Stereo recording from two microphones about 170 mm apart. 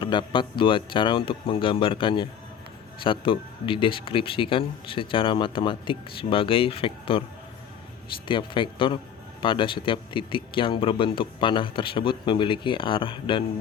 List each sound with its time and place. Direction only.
0.0 s speech: 30° left (ahead or behind)
8.3 s speech: 30° left (ahead or behind)